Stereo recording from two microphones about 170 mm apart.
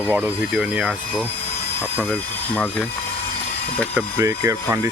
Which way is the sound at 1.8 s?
10° left (ahead or behind).